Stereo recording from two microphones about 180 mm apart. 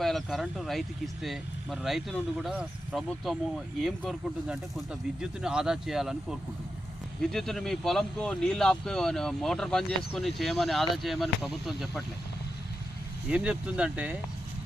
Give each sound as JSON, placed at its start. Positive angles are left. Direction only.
{"t": 0.0, "sound": "speech", "side_deg": 0}
{"t": 7.2, "sound": "speech", "side_deg": 0}
{"t": 13.2, "sound": "speech", "side_deg": -5}